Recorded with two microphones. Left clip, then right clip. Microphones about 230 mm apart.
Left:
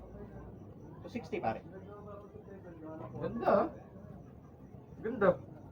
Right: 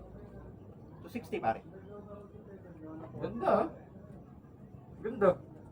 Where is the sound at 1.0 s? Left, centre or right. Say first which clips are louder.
Right 3 dB; right.